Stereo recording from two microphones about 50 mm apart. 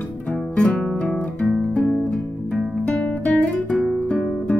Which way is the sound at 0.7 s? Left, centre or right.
Centre.